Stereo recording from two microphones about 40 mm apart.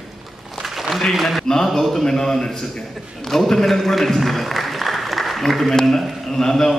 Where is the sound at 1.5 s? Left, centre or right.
Centre.